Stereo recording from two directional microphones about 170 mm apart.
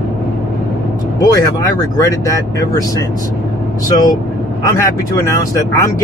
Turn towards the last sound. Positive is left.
turn(degrees=20)  # may be behind; listen again after turning